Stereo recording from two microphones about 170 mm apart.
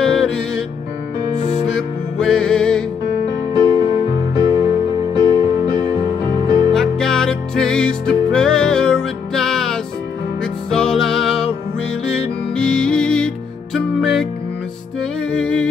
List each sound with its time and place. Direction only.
0.0 s music: 5° left (ahead or behind)
1.8 s music: 5° left (ahead or behind)
3.5 s music: 25° right (ahead or behind)
6.7 s music: 5° left (ahead or behind)
15.2 s music: 5° left (ahead or behind)